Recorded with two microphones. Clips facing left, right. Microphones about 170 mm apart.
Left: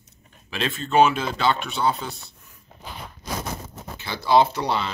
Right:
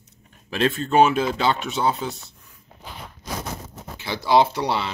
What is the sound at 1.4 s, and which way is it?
Speech, 20° right (ahead or behind).